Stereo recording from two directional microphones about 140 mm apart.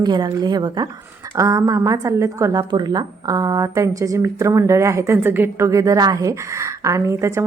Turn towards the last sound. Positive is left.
turn(degrees=-20)  # may be behind; listen again after turning